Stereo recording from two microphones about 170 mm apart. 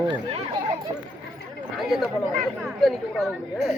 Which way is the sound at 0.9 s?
30° right (ahead or behind).